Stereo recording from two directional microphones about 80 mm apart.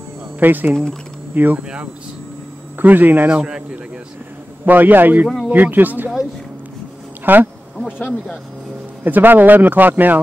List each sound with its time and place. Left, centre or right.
0.4 s speech: right
7.3 s speech: right
7.7 s insect: centre
9.0 s speech: right